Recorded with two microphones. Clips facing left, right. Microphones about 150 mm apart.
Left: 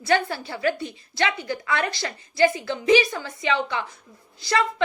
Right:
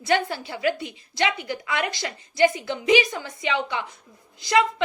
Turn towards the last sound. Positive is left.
turn(degrees=-20)  # may be behind; listen again after turning